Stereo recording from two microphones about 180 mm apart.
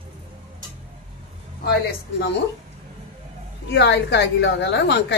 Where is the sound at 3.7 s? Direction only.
70° left (ahead or behind).